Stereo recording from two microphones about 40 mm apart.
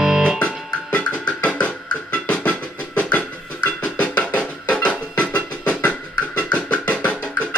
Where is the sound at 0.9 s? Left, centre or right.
Left.